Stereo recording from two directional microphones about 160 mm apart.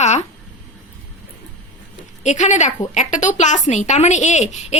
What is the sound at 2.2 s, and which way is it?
Speech, 45° left (ahead or behind).